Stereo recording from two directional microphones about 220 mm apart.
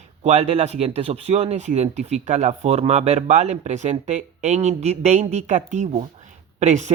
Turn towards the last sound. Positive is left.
turn(degrees=-30)  # may be behind; listen again after turning